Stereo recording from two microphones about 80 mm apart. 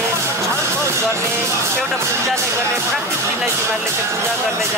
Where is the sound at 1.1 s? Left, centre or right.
Right.